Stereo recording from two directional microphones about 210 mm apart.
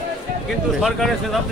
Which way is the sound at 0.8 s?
Centre (ahead or behind).